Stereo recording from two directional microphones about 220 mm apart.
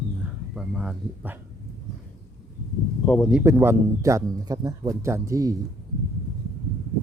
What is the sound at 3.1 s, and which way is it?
Speech, 5° left (ahead or behind).